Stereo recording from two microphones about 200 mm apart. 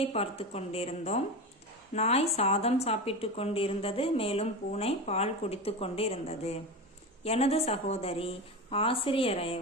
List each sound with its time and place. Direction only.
0.0 s a woman's voice: 30° left (ahead or behind)